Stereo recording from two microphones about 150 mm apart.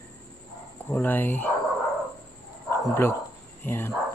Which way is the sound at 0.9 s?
10° left (ahead or behind).